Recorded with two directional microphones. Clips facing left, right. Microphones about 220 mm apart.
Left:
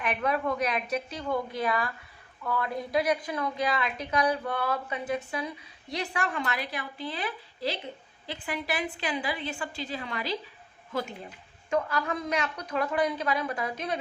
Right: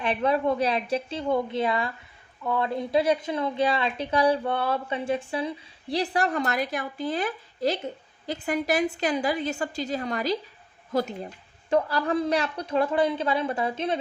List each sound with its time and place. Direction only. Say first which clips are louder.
0.0 s a woman's voice: right 5 dB; 30° right (ahead or behind)